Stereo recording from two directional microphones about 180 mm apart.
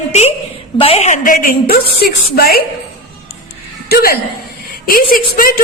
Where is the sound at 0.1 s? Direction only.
40° left (ahead or behind).